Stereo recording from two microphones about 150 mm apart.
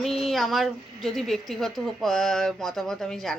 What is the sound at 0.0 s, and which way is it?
Speech, centre (ahead or behind).